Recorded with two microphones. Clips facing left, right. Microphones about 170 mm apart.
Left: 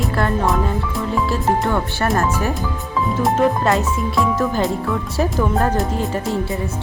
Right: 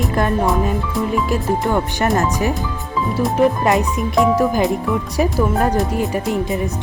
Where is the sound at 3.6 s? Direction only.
15° right (ahead or behind).